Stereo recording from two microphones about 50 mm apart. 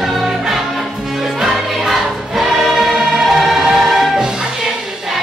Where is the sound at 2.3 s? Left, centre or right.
Centre.